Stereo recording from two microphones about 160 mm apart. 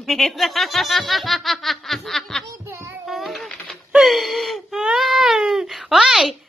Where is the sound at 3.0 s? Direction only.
Centre (ahead or behind).